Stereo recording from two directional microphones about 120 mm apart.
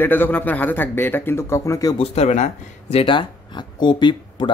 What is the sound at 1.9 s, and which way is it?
Speech, 70° left (ahead or behind).